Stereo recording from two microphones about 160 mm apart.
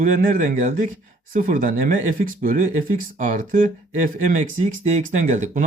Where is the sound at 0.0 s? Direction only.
55° right (ahead or behind).